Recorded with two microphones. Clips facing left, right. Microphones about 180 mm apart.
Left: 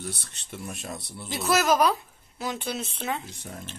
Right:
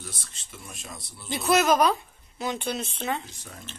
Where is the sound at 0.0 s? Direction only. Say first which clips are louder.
Left 6 dB; 65° left (ahead or behind).